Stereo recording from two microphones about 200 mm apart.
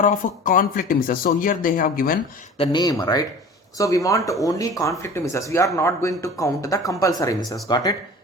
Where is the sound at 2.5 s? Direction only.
25° left (ahead or behind).